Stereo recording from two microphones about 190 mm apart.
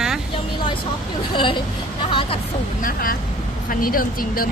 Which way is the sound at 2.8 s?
50° left (ahead or behind).